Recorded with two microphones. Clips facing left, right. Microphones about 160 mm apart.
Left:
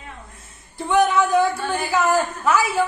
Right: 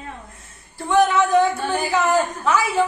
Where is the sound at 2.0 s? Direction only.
5° left (ahead or behind).